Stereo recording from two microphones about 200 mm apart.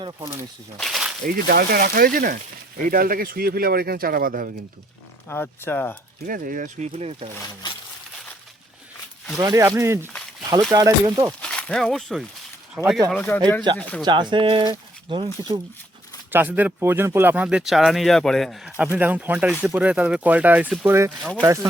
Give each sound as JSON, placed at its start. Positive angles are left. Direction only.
{"t": 0.8, "sound": "speech", "side_deg": 0}
{"t": 1.2, "sound": "speech", "side_deg": -45}
{"t": 5.3, "sound": "speech", "side_deg": 10}
{"t": 6.2, "sound": "speech", "side_deg": -45}
{"t": 9.4, "sound": "speech", "side_deg": -15}
{"t": 11.4, "sound": "speech", "side_deg": 5}
{"t": 14.0, "sound": "speech", "side_deg": -20}
{"t": 16.3, "sound": "speech", "side_deg": -10}
{"t": 21.2, "sound": "speech", "side_deg": 5}
{"t": 21.4, "sound": "speech", "side_deg": -15}